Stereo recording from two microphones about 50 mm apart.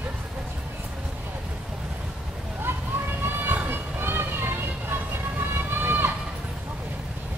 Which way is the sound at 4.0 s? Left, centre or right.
Right.